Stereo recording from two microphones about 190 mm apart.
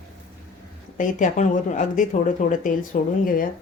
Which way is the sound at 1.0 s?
40° left (ahead or behind).